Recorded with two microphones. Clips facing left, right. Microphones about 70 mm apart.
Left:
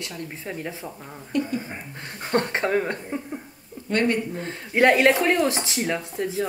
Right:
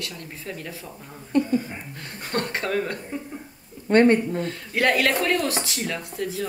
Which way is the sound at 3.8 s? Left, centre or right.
Right.